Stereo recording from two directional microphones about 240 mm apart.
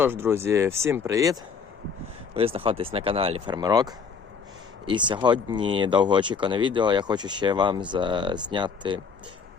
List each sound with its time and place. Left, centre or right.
0.0 s speech: centre